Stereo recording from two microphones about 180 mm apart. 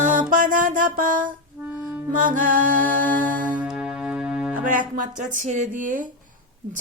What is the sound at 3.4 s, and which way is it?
Music, 5° right (ahead or behind).